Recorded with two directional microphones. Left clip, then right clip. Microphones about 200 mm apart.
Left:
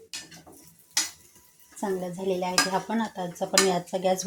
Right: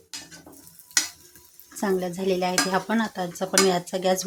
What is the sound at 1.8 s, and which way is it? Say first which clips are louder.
Dishes: right 4 dB; 25° right (ahead or behind).